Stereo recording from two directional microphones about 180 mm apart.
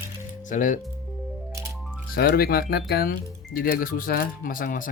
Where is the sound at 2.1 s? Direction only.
55° left (ahead or behind).